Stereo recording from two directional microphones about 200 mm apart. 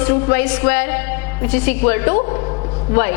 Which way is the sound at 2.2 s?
25° left (ahead or behind).